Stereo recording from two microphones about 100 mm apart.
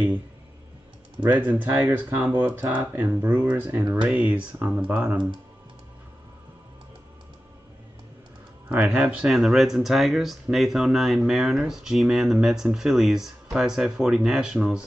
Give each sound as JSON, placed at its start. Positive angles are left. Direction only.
{"t": 1.9, "sound": "speech", "side_deg": -20}
{"t": 8.6, "sound": "speech", "side_deg": -10}